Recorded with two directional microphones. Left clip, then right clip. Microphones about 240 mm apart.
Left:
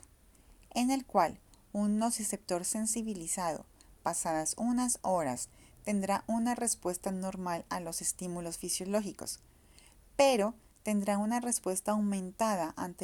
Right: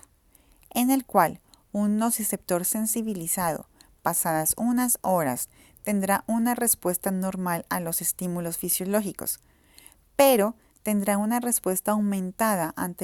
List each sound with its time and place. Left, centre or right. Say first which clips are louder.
0.7 s a woman's voice: right 7 dB; right